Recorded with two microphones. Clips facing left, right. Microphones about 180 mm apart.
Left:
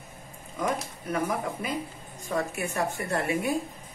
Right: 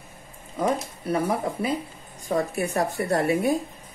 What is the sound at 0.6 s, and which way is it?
A woman's voice, 30° right (ahead or behind).